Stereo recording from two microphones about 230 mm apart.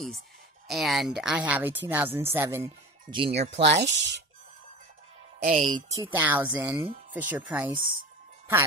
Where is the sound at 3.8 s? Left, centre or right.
Right.